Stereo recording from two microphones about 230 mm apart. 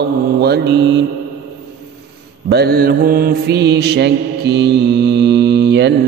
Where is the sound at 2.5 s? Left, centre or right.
Right.